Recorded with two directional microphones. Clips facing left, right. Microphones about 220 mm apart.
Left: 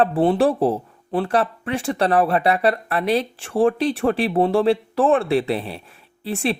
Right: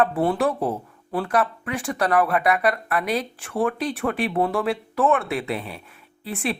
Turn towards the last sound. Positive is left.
turn(degrees=30)  # may be behind; listen again after turning